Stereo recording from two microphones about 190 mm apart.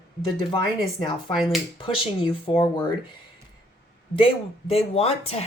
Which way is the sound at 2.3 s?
25° left (ahead or behind).